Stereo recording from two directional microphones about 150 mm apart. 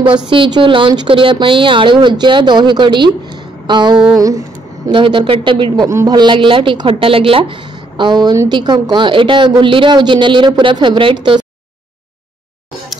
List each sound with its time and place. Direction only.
0.3 s a woman's voice: 35° right (ahead or behind)
5.9 s a woman's voice: 25° right (ahead or behind)